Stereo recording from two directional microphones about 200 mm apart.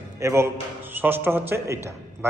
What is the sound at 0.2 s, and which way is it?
A man's voice, 15° right (ahead or behind).